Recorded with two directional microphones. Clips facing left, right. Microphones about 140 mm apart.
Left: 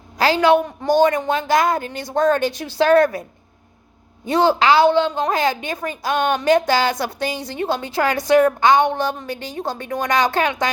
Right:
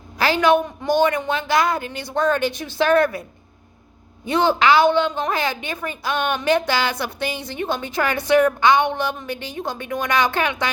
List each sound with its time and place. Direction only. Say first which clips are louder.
0.2 s a woman's voice: left 2 dB; 35° left (ahead or behind)
4.3 s a woman's voice: left 1 dB; 40° left (ahead or behind)